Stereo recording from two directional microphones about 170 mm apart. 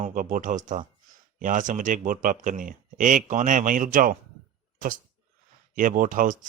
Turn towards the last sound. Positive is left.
turn(degrees=-50)  # may be behind; listen again after turning